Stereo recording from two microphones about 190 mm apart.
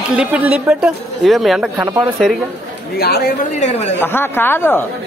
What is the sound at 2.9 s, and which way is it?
Speech, 55° left (ahead or behind).